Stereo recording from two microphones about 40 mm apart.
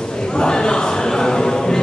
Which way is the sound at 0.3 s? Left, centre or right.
Centre.